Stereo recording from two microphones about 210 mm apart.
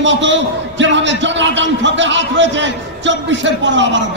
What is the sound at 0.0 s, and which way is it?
A man's voice, 60° right (ahead or behind).